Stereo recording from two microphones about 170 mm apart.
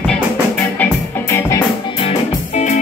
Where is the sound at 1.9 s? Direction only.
40° left (ahead or behind).